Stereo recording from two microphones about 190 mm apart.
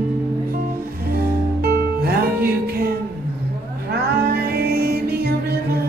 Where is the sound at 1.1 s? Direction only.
55° right (ahead or behind).